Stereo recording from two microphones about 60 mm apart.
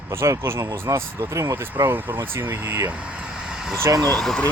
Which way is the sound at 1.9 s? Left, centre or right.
Right.